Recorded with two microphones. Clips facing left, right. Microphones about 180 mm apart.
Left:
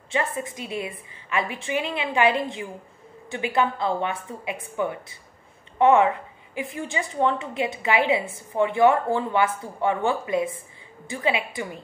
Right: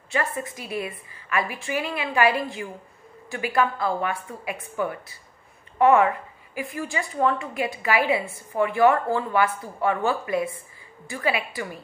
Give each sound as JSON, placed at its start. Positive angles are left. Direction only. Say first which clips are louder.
{"t": 0.1, "sound": "a woman's voice", "louder": "left 1 dB", "side_deg": 20}